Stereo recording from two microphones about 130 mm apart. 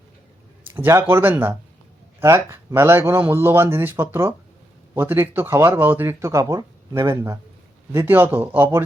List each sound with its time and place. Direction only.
0.6 s speech: 15° right (ahead or behind)